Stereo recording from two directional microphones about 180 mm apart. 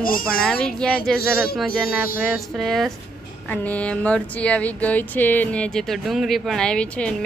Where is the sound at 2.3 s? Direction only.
Centre (ahead or behind).